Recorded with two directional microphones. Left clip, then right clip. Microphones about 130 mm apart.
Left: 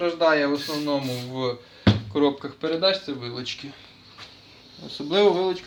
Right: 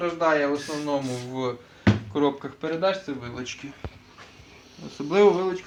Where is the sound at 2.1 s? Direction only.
10° left (ahead or behind).